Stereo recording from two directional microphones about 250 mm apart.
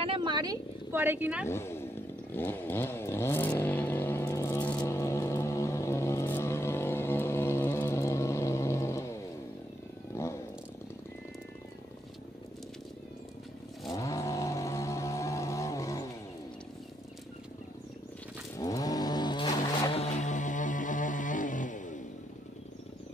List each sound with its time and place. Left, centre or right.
0.0 s a sound: centre
1.5 s speech: centre
2.3 s vehicle: centre
10.2 s a sound: centre
13.8 s vehicle: centre
18.6 s vehicle: centre; by 22.0 s left